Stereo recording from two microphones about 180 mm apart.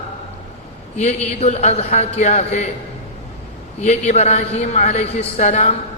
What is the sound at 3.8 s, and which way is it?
A man's voice, 40° left (ahead or behind).